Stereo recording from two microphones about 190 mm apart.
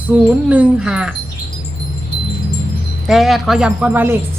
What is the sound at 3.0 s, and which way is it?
Wind chime, centre (ahead or behind).